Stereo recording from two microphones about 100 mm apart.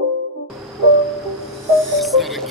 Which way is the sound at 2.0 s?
Centre (ahead or behind).